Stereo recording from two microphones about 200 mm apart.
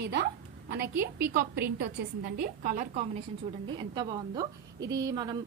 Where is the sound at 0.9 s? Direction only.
10° right (ahead or behind).